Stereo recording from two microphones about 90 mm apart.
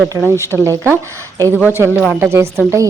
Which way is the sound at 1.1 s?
35° right (ahead or behind).